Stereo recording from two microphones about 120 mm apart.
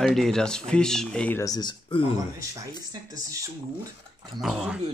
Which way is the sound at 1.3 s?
30° left (ahead or behind).